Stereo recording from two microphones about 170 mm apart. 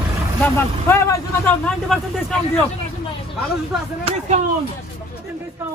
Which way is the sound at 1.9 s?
Centre (ahead or behind).